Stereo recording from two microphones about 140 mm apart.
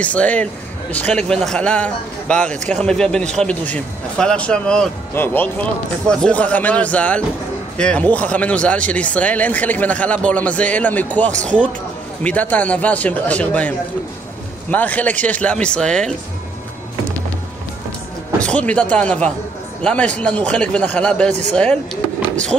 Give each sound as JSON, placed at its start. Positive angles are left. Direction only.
{"t": 0.0, "sound": "speech", "side_deg": 10}
{"t": 18.4, "sound": "speech", "side_deg": 10}